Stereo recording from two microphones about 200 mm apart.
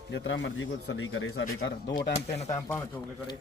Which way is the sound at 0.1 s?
70° left (ahead or behind).